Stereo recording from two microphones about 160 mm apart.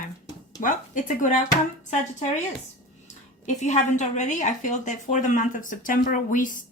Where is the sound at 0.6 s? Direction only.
55° left (ahead or behind).